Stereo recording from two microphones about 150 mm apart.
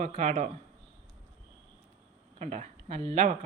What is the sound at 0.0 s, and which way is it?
Speech, 55° right (ahead or behind).